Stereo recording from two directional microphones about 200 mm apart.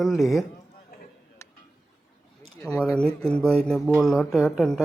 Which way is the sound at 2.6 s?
15° left (ahead or behind).